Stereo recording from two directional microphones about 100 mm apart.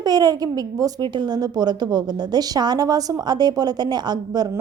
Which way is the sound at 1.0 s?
50° right (ahead or behind).